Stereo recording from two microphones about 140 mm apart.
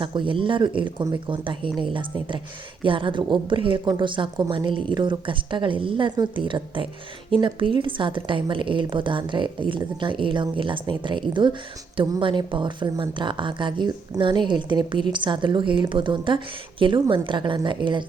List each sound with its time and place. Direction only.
0.0 s speech: 35° right (ahead or behind)